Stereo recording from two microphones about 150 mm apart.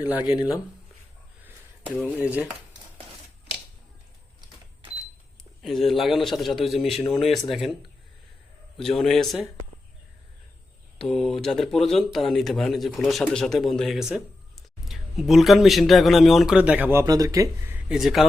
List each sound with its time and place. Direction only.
0.0 s dishes: 10° right (ahead or behind)
0.3 s speech: 20° left (ahead or behind)
2.0 s dishes: 10° right (ahead or behind)
5.6 s speech: centre (ahead or behind)
8.8 s speech: centre (ahead or behind)
11.1 s speech: 5° left (ahead or behind)